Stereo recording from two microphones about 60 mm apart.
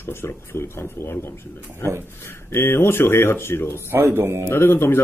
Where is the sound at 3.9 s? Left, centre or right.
Right.